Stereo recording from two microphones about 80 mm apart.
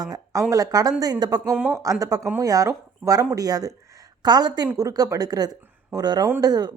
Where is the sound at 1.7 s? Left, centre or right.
Right.